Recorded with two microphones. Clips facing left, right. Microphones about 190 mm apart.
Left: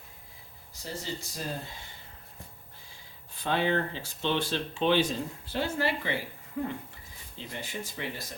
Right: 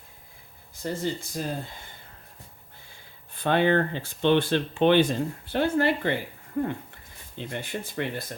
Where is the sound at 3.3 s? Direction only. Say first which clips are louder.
Right 6 dB; 55° right (ahead or behind).